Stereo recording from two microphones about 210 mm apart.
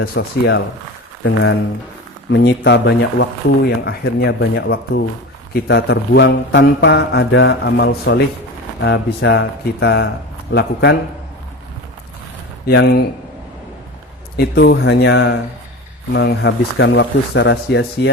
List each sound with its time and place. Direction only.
0.0 s speech: 45° left (ahead or behind)
12.6 s speech: 50° left (ahead or behind)
14.3 s speech: 50° left (ahead or behind)